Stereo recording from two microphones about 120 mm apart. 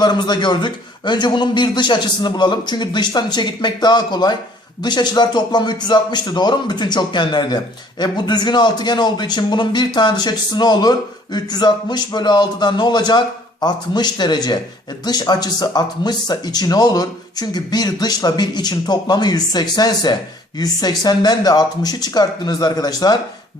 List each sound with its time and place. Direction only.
0.0 s speech: 35° left (ahead or behind)